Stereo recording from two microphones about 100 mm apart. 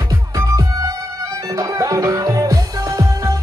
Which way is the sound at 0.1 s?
40° right (ahead or behind).